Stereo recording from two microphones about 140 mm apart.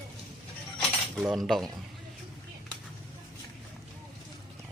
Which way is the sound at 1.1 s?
Centre (ahead or behind).